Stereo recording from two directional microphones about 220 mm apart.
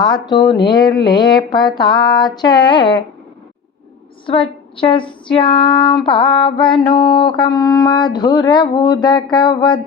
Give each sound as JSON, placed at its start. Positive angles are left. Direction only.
{"t": 0.0, "sound": "speech", "side_deg": 20}
{"t": 4.8, "sound": "speech", "side_deg": 20}